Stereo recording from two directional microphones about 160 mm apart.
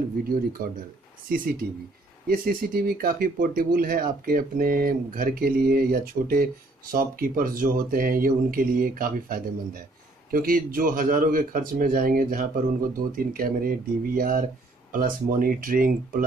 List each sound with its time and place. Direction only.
0.2 s speech: 65° right (ahead or behind)